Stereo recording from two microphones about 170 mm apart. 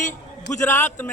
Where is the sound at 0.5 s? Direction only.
15° left (ahead or behind).